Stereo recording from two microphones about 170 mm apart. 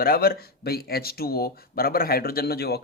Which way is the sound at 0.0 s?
60° left (ahead or behind).